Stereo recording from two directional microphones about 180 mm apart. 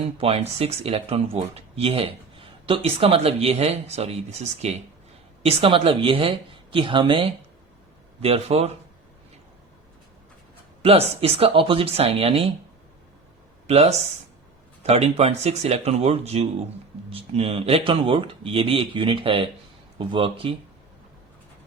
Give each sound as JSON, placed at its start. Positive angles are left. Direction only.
{"t": 0.0, "sound": "speech", "side_deg": -35}
{"t": 10.8, "sound": "speech", "side_deg": -35}
{"t": 13.7, "sound": "speech", "side_deg": -35}